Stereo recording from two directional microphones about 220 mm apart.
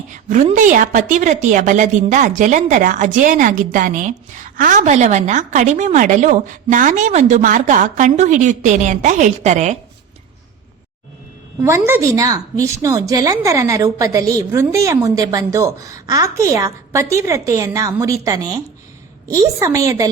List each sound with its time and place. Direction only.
0.1 s a woman's voice: 35° right (ahead or behind)
11.9 s a woman's voice: 15° right (ahead or behind)